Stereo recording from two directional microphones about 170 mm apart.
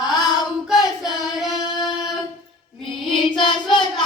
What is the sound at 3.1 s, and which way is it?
Singing, 30° left (ahead or behind).